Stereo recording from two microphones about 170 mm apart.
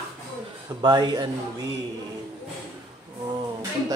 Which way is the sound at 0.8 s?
25° right (ahead or behind).